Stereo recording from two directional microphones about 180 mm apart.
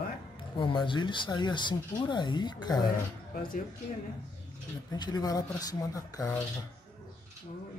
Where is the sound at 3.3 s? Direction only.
50° left (ahead or behind).